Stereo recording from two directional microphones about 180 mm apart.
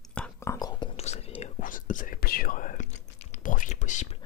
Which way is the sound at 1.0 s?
35° left (ahead or behind).